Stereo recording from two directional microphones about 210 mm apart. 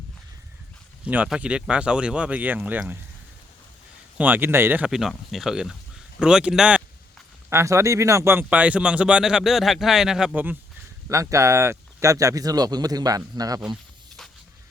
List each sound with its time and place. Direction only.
1.0 s speech: 5° right (ahead or behind)
4.2 s speech: 10° right (ahead or behind)